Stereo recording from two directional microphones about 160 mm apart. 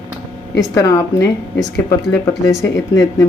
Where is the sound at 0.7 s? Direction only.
15° left (ahead or behind).